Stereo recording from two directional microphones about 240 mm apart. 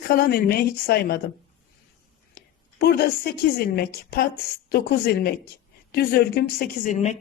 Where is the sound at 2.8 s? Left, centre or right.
Left.